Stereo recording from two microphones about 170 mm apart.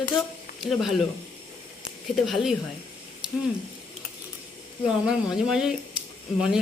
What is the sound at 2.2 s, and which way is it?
Speech, centre (ahead or behind).